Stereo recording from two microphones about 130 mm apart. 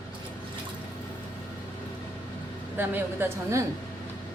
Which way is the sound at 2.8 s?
15° right (ahead or behind).